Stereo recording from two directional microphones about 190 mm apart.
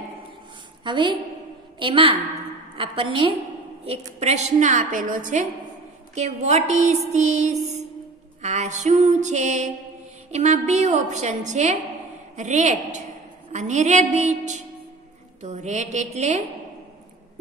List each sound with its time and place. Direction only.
0.8 s a woman's voice: 25° right (ahead or behind)